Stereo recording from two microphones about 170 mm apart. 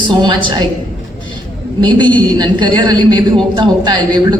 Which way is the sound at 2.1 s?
25° right (ahead or behind).